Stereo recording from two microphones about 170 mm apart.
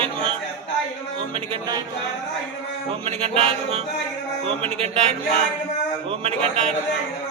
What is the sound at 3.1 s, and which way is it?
Music, 35° right (ahead or behind).